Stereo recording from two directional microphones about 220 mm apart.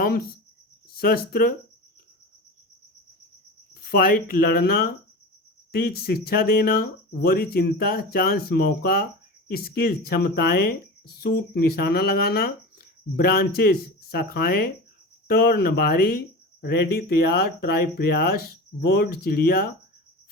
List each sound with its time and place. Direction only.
0.0 s speech: 45° left (ahead or behind)
3.8 s speech: 45° left (ahead or behind)